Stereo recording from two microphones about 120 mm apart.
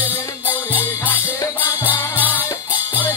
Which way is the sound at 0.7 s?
15° left (ahead or behind).